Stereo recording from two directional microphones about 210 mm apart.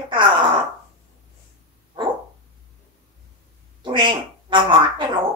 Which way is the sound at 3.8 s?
20° right (ahead or behind).